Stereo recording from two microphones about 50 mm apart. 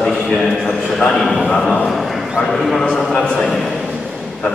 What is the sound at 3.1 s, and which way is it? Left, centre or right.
Speech, centre.